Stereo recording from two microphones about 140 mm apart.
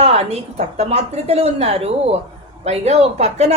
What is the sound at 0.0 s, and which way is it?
A woman's voice, 50° right (ahead or behind).